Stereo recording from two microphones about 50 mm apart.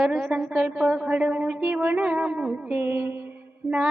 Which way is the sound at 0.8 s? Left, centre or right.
Right.